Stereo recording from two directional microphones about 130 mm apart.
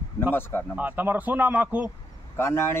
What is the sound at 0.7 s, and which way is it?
Speech, 15° right (ahead or behind).